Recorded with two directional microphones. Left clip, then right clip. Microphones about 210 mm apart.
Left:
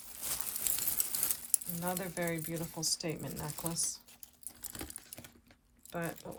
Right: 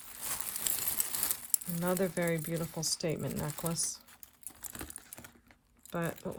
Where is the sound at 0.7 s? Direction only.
25° right (ahead or behind).